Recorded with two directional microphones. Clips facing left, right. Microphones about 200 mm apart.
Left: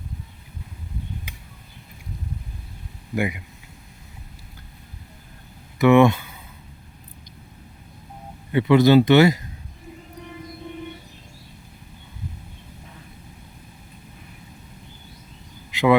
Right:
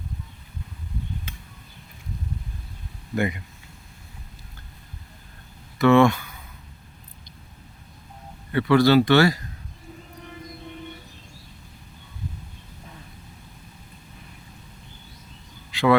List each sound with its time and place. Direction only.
1.3 s a sound: 15° left (ahead or behind)
3.2 s speech: 10° left (ahead or behind)
5.8 s speech: 20° left (ahead or behind)
8.5 s speech: 20° left (ahead or behind)
15.7 s duck: 20° left (ahead or behind)